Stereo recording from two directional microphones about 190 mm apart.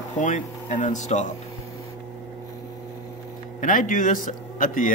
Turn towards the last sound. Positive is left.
turn(degrees=45)  # may be behind; listen again after turning